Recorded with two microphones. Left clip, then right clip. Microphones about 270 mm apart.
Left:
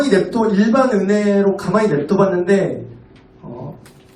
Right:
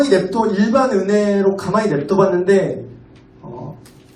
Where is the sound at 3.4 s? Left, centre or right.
Right.